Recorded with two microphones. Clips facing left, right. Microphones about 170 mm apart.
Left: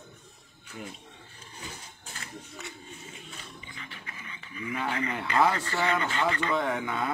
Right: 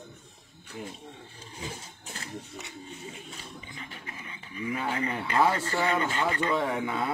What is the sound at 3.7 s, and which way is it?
Pant, 40° right (ahead or behind).